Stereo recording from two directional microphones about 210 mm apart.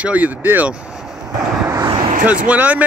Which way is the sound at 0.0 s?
5° right (ahead or behind).